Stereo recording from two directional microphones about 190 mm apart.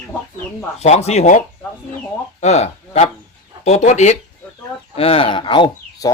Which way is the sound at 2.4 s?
35° left (ahead or behind).